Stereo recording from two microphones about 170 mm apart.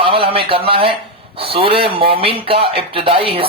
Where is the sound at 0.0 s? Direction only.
35° right (ahead or behind).